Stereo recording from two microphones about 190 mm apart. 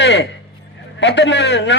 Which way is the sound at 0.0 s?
65° left (ahead or behind).